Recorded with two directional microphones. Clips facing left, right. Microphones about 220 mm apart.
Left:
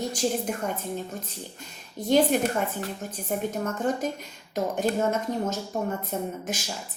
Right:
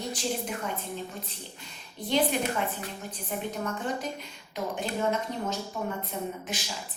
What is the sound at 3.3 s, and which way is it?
A woman's voice, 45° left (ahead or behind).